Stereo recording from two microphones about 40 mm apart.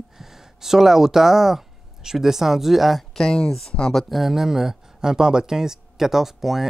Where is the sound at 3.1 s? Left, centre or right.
Centre.